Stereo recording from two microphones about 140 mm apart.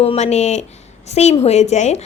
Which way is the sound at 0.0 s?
50° left (ahead or behind).